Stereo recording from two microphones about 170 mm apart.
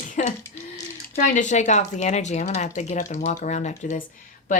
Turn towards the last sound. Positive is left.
turn(degrees=50)  # may be behind; listen again after turning